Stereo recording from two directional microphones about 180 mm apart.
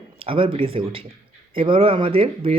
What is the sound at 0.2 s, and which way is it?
Speech, 30° right (ahead or behind).